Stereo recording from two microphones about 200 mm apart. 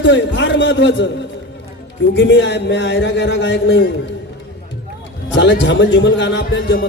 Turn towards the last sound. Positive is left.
turn(degrees=65)  # may be behind; listen again after turning